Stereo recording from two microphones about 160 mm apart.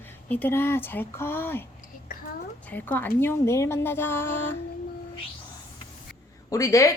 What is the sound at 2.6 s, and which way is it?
A woman's voice, 10° left (ahead or behind).